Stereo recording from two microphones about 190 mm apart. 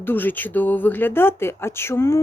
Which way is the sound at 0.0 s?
10° left (ahead or behind).